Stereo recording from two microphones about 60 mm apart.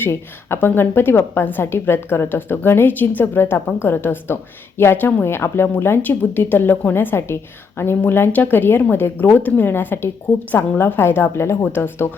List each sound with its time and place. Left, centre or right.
0.0 s a woman's voice: left
6.0 s a woman's voice: left